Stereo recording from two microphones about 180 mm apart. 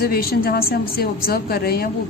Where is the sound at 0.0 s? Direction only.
55° left (ahead or behind).